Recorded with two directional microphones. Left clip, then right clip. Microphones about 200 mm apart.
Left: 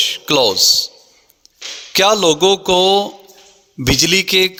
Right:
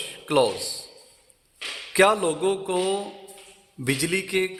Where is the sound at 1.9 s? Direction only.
45° left (ahead or behind).